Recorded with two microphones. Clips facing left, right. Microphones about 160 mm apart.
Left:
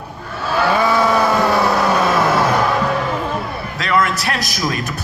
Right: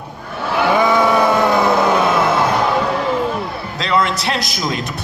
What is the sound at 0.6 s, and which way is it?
Vehicle, 20° right (ahead or behind).